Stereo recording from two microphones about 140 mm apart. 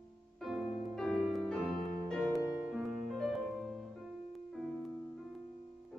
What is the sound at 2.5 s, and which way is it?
Music, 20° right (ahead or behind).